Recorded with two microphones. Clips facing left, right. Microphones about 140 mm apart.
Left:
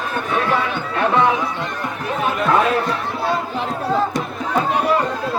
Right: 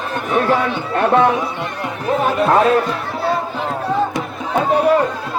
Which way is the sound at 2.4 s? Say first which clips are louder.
Right 3 dB; 35° right (ahead or behind).